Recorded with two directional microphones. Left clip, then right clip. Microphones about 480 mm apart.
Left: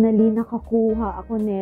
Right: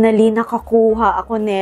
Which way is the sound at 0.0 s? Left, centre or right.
Centre.